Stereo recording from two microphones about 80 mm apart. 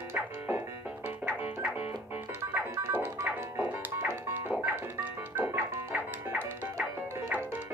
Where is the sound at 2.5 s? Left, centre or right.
Right.